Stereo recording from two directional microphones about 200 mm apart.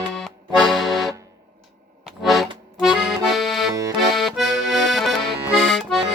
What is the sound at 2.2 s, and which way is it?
Accordion, centre (ahead or behind).